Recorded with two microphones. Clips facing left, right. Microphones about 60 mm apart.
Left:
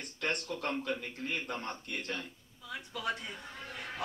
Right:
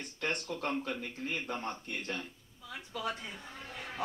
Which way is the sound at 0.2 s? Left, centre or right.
Centre.